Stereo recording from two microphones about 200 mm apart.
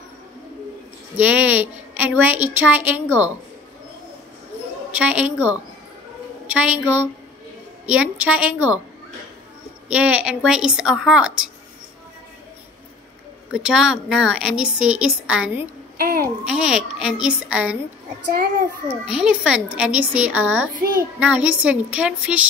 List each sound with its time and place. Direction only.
1.1 s a woman's voice: 5° right (ahead or behind)
4.9 s a woman's voice: 5° right (ahead or behind)
7.8 s a woman's voice: 5° right (ahead or behind)
9.8 s a woman's voice: 5° right (ahead or behind)
13.5 s a woman's voice: 5° right (ahead or behind)
16.0 s a child's voice: 50° right (ahead or behind)
16.4 s a woman's voice: 5° right (ahead or behind)
19.0 s a woman's voice: 5° right (ahead or behind)